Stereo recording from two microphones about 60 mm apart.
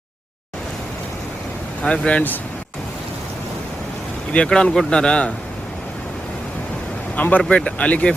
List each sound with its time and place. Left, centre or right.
1.8 s speech: centre
4.3 s speech: centre
7.2 s speech: left